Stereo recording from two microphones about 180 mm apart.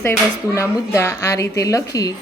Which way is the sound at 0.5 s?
15° left (ahead or behind).